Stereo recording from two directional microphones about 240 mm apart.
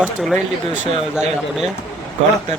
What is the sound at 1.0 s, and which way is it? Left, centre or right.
Speech, centre.